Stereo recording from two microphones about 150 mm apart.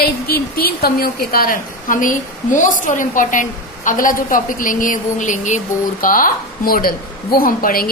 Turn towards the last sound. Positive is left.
turn(degrees=75)  # may be behind; listen again after turning